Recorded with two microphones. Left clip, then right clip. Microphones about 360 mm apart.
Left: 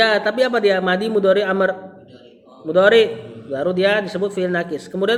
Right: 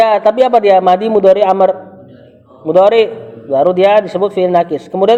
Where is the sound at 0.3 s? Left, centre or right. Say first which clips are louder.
Right 8 dB; right.